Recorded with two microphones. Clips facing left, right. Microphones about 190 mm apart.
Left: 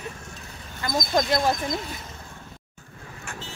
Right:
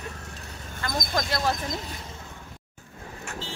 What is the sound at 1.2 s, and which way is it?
Speech, 20° left (ahead or behind).